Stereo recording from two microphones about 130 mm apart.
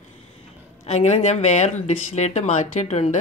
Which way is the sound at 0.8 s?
55° left (ahead or behind).